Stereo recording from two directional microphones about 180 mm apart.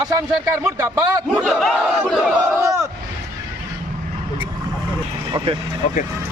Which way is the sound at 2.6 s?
15° right (ahead or behind).